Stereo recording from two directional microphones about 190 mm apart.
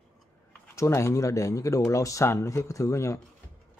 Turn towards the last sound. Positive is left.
turn(degrees=15)  # may be behind; listen again after turning